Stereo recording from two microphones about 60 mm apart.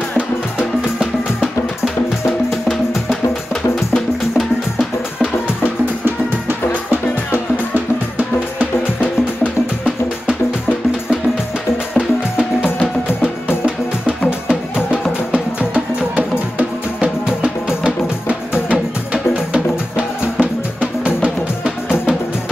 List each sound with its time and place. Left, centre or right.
2.5 s music: centre
7.7 s music: right
14.5 s music: centre
17.0 s music: centre
19.5 s music: right